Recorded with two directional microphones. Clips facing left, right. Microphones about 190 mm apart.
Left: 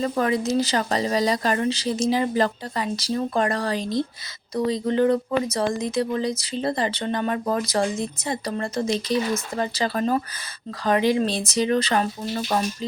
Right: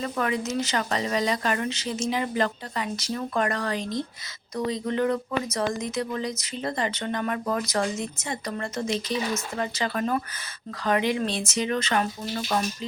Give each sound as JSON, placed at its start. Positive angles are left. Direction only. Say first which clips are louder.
{"t": 0.0, "sound": "speech", "louder": "left 5 dB", "side_deg": 35}